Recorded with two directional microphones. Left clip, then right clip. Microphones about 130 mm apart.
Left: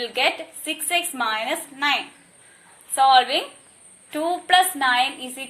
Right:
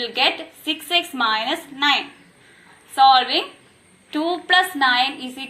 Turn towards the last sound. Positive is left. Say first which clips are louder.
# right 1 dB
turn(degrees=35)  # may be behind; listen again after turning